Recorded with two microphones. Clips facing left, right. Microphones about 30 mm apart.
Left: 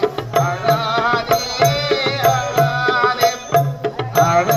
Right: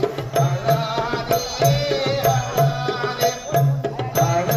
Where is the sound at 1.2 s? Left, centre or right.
Left.